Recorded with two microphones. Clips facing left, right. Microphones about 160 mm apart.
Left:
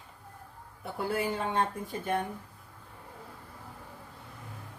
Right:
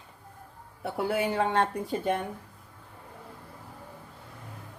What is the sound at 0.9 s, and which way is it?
Speech, 75° right (ahead or behind).